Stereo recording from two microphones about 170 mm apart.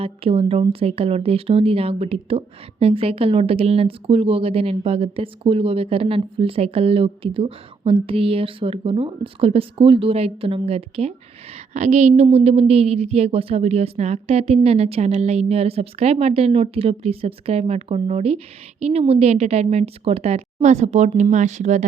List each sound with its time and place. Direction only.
0.0 s speech: 35° right (ahead or behind)